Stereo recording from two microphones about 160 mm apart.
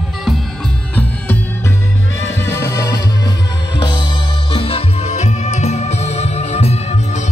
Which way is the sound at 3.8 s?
30° left (ahead or behind).